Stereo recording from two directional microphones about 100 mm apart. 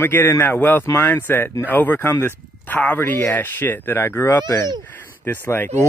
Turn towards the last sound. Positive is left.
turn(degrees=20)  # may be behind; listen again after turning